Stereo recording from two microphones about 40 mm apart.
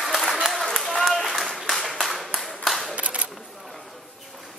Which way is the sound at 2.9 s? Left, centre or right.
Right.